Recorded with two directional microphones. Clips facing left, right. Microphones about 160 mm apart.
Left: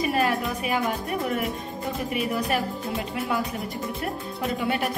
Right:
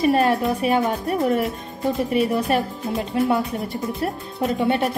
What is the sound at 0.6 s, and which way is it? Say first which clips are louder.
A woman's voice: right 6 dB; 35° right (ahead or behind).